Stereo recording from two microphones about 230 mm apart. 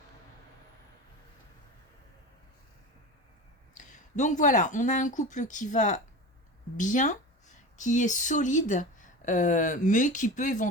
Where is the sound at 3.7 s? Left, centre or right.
Left.